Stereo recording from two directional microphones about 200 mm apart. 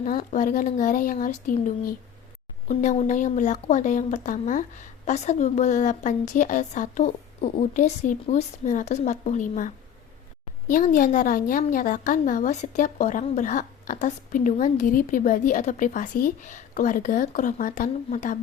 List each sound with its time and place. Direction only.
0.0 s a woman's voice: 40° left (ahead or behind)